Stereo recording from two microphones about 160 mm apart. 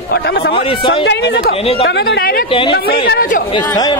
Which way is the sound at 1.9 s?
90° left.